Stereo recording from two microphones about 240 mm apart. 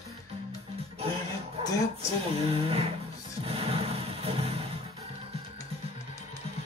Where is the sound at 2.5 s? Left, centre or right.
Right.